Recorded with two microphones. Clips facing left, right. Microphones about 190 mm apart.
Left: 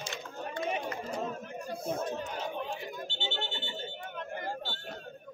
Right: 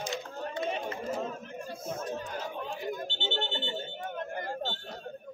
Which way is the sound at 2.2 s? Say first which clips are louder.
Even; 20° left (ahead or behind).